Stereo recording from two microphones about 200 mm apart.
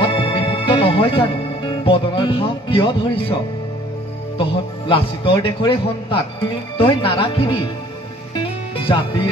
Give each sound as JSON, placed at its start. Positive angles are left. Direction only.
{"t": 0.0, "sound": "speech", "side_deg": 25}
{"t": 4.4, "sound": "a man's voice", "side_deg": 25}
{"t": 8.8, "sound": "a man's voice", "side_deg": 25}